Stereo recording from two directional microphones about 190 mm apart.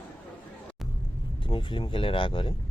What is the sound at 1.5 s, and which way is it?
Speech, 25° left (ahead or behind).